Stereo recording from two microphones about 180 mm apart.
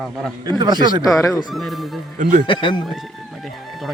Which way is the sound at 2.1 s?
45° right (ahead or behind).